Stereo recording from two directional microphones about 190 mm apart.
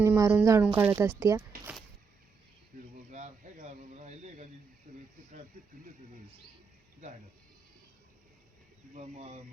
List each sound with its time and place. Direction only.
0.0 s speech: 10° right (ahead or behind)
2.7 s a sound: 45° right (ahead or behind)
9.0 s speech: 35° right (ahead or behind)